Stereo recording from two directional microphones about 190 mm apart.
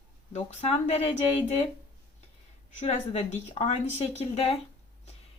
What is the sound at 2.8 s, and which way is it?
A woman's voice, 35° left (ahead or behind).